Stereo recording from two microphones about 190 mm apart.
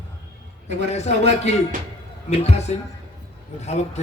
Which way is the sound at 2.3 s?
35° left (ahead or behind).